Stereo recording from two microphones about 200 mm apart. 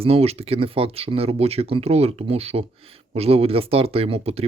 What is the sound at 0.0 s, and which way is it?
Speech, 30° right (ahead or behind).